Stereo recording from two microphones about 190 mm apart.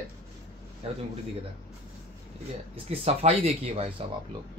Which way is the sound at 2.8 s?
30° right (ahead or behind).